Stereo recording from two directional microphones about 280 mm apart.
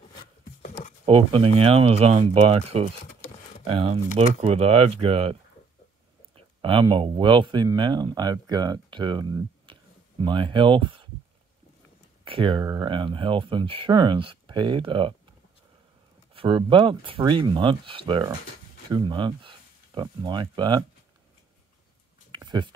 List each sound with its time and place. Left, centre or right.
0.2 s rub: left
1.0 s speech: centre
12.3 s speech: centre
16.3 s speech: centre
22.3 s a sound: centre